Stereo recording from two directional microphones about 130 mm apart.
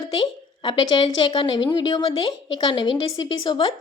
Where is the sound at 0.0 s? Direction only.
40° left (ahead or behind).